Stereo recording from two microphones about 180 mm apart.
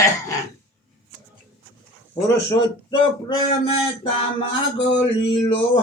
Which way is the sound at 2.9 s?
30° left (ahead or behind).